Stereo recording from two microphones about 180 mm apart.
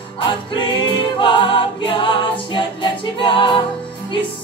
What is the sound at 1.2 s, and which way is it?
A capella, 25° left (ahead or behind).